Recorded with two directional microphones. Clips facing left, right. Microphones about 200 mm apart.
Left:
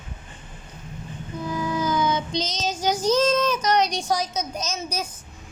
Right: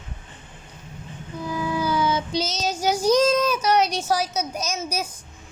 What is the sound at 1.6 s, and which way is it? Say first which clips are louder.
A child's voice: right 1 dB; 10° right (ahead or behind).